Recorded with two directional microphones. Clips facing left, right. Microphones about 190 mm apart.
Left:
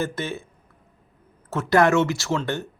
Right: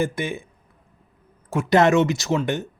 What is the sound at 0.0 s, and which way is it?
Speech, 15° right (ahead or behind).